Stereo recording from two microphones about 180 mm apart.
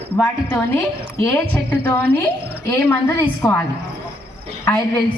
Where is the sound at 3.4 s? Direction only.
Centre (ahead or behind).